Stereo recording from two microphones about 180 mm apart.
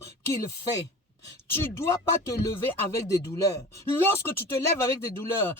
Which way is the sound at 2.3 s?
15° left (ahead or behind).